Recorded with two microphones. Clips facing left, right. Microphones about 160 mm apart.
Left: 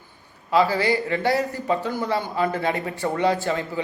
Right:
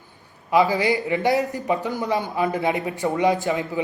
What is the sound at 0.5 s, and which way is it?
A man's voice, 15° right (ahead or behind).